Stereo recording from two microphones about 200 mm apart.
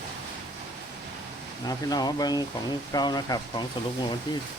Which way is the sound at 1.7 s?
20° left (ahead or behind).